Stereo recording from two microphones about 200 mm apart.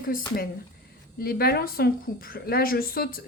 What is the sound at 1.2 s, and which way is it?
A woman's voice, 50° left (ahead or behind).